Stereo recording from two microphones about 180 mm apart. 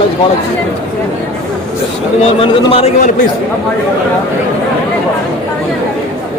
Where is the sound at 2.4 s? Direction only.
30° left (ahead or behind).